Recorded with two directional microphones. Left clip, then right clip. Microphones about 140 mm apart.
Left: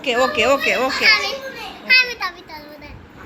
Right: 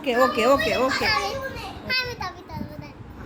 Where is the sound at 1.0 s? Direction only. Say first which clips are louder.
Left 8 dB; 65° right (ahead or behind).